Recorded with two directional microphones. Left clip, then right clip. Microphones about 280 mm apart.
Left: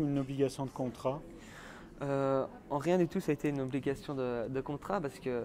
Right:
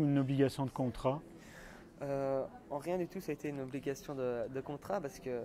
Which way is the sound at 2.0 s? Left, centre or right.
Left.